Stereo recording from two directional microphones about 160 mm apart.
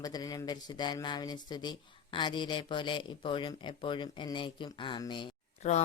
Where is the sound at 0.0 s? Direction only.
25° left (ahead or behind).